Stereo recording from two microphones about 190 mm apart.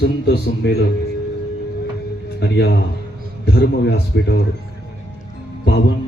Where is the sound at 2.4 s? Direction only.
60° left (ahead or behind).